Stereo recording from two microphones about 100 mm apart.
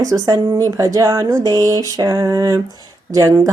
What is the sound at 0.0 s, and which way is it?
A woman's voice, 35° right (ahead or behind).